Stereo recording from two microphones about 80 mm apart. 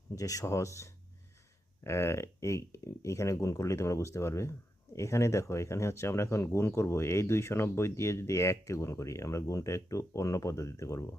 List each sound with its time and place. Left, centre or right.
0.2 s speech: left